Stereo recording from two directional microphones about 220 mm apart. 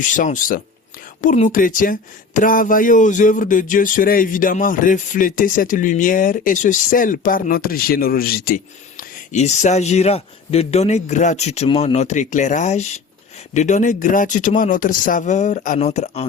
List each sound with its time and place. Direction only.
0.0 s speech: 35° left (ahead or behind)